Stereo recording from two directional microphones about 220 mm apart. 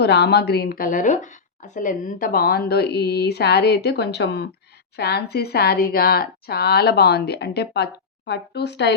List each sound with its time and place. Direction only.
0.0 s speech: 50° left (ahead or behind)